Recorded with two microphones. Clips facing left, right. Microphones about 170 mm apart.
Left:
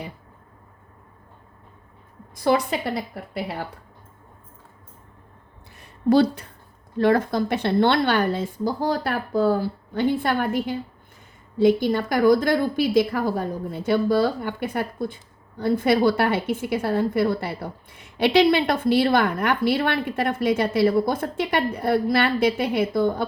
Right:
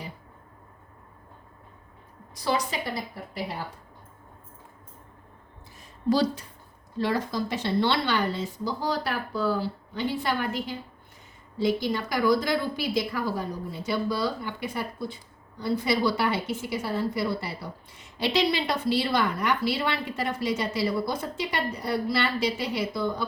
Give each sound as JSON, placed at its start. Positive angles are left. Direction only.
{"t": 2.3, "sound": "a woman's voice", "side_deg": 55}
{"t": 5.7, "sound": "a sound", "side_deg": 60}
{"t": 6.9, "sound": "a woman's voice", "side_deg": 55}